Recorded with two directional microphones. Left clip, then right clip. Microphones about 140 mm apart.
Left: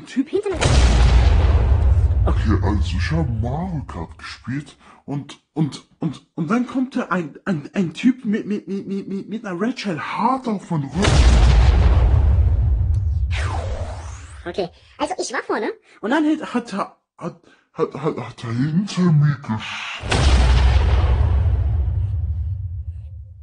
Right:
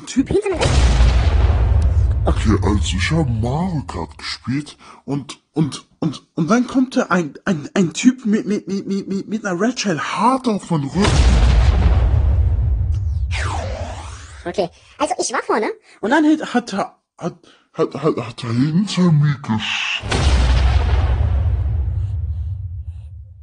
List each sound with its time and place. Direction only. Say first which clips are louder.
0.1 s speech: right 4 dB; 25° right (ahead or behind)
0.5 s a sound: right 1 dB; centre (ahead or behind)
2.4 s speech: right 4 dB; 40° right (ahead or behind)
3.0 s speech: right 5 dB; 60° right (ahead or behind); by 10.2 s 40° right (ahead or behind)
10.9 s a sound: even; centre (ahead or behind)
14.4 s speech: right 4 dB; 20° right (ahead or behind)
17.7 s speech: right 4 dB; 40° right (ahead or behind)
20.1 s artillery fire: even; centre (ahead or behind)